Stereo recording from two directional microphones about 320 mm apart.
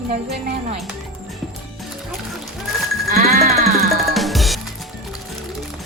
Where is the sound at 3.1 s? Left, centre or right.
Right.